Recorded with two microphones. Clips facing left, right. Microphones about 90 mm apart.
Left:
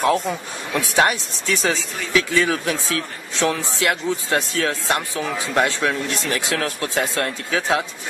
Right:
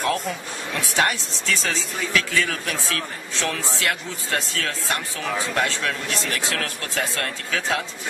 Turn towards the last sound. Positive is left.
turn(degrees=15)  # may be behind; listen again after turning